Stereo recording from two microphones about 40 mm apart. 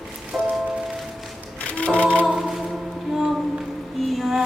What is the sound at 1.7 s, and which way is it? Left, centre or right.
Singing, left.